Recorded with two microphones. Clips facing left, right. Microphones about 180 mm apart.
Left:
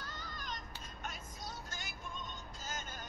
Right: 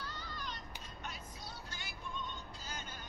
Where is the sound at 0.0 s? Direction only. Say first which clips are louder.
Right 2 dB; 45° left (ahead or behind).